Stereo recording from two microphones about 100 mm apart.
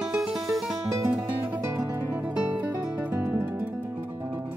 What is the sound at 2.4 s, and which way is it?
Music, 15° right (ahead or behind).